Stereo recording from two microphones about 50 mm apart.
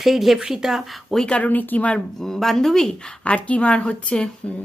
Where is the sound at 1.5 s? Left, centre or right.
Left.